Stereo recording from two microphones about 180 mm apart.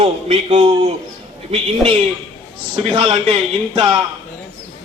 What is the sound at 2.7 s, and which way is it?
A man's voice, 25° right (ahead or behind).